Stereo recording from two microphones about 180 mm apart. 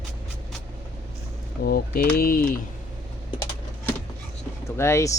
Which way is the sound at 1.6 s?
55° left (ahead or behind).